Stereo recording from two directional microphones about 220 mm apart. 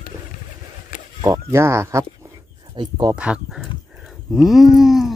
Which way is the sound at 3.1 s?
5° right (ahead or behind).